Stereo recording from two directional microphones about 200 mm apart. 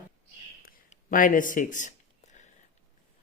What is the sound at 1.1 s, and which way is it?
Speech, 40° left (ahead or behind).